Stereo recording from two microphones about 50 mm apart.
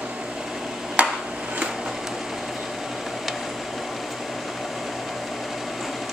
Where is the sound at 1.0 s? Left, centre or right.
Right.